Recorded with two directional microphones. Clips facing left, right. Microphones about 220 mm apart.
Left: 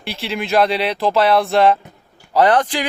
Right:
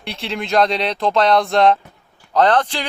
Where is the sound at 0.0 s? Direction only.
5° left (ahead or behind).